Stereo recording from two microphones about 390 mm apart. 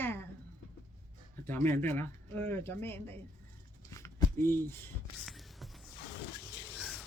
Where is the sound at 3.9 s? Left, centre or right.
Centre.